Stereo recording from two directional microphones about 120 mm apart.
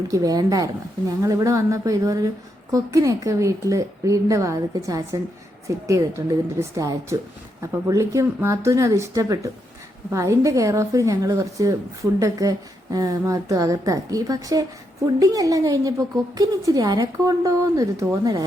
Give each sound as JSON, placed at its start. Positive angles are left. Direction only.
{"t": 0.1, "sound": "a woman's voice", "side_deg": -30}